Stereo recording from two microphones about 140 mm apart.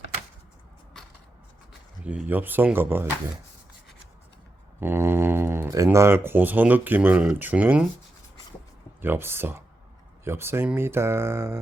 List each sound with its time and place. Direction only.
2.0 s speech: 10° right (ahead or behind)
4.8 s speech: 15° right (ahead or behind)
9.0 s speech: 15° right (ahead or behind)